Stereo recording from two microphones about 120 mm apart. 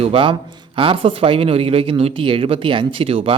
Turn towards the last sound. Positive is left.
turn(degrees=-50)  # may be behind; listen again after turning